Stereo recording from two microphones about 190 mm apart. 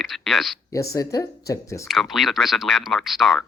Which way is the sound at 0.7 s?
15° left (ahead or behind).